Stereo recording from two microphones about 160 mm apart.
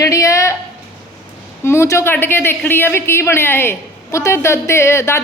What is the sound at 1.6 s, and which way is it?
A man's voice, 15° left (ahead or behind).